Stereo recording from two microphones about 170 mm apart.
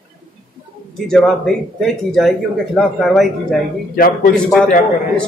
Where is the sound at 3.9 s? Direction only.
60° left (ahead or behind).